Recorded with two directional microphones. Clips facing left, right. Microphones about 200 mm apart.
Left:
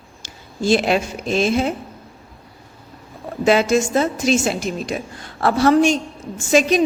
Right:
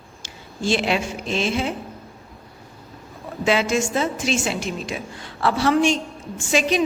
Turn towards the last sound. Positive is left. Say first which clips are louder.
# left 5 dB
turn(degrees=45)  # may be behind; listen again after turning